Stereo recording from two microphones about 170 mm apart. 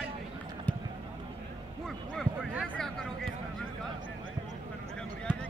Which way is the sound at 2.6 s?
5° left (ahead or behind).